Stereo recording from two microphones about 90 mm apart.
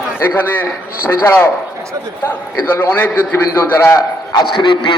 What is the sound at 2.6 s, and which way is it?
A man's voice, 25° left (ahead or behind).